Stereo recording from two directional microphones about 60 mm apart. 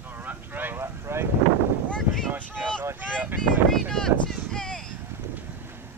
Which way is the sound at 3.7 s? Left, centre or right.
Centre.